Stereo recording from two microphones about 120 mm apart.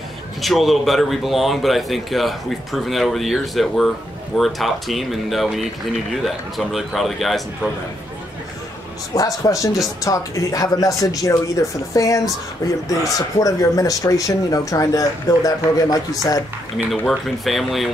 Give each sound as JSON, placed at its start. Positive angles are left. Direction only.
{"t": 0.4, "sound": "speech", "side_deg": 0}
{"t": 9.1, "sound": "speech", "side_deg": 30}
{"t": 16.7, "sound": "speech", "side_deg": 0}